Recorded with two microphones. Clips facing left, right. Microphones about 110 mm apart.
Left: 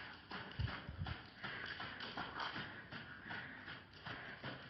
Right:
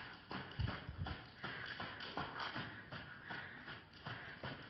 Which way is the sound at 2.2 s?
50° right (ahead or behind).